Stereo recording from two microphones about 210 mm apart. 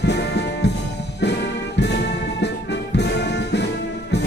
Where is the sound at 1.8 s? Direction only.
55° left (ahead or behind).